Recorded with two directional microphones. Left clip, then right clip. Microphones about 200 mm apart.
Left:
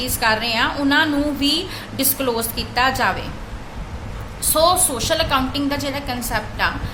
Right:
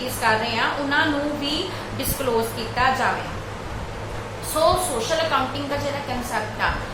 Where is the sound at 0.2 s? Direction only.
60° left (ahead or behind).